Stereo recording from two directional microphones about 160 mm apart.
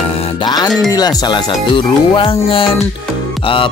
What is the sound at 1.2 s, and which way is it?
Speech, 30° left (ahead or behind).